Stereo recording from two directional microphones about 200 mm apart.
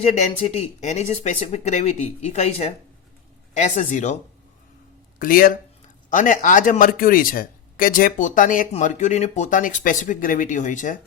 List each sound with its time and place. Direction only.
0.0 s speech: 35° left (ahead or behind)
5.2 s speech: 45° left (ahead or behind)